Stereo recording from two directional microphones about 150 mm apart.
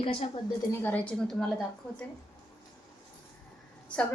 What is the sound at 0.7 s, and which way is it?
A woman's voice, 15° left (ahead or behind).